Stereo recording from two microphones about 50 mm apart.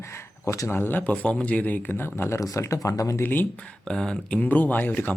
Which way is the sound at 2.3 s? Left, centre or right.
Left.